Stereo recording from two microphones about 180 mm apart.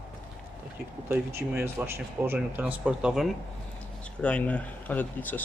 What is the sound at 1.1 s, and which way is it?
Speech, 10° right (ahead or behind).